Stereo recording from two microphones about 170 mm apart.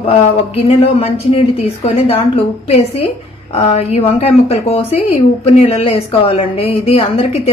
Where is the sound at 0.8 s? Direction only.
35° left (ahead or behind).